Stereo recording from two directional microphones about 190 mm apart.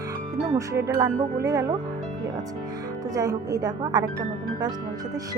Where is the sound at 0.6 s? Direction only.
15° right (ahead or behind).